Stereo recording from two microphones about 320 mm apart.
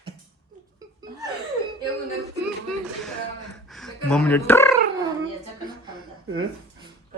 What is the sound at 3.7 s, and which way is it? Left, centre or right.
Speech, centre.